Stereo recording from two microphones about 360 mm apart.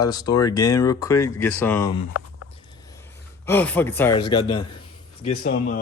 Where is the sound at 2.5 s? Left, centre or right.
Centre.